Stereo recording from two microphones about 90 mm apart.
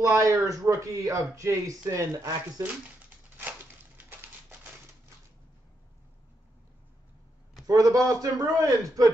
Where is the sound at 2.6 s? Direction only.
20° right (ahead or behind).